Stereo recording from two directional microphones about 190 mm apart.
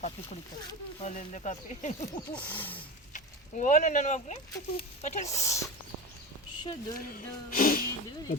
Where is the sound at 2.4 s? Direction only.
10° left (ahead or behind).